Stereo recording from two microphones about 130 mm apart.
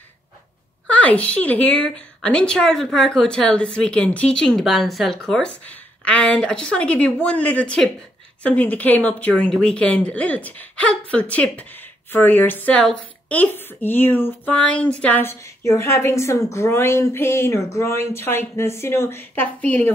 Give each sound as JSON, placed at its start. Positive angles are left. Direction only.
{"t": 0.8, "sound": "a woman's voice", "side_deg": 10}